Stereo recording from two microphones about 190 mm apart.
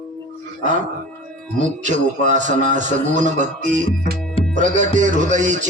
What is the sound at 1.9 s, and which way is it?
A man's voice, 40° right (ahead or behind).